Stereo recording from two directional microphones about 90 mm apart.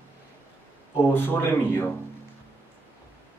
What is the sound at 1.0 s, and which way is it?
Speech, 25° left (ahead or behind).